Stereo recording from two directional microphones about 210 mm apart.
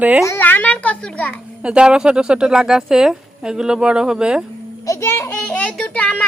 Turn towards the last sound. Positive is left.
turn(degrees=5)  # may be behind; listen again after turning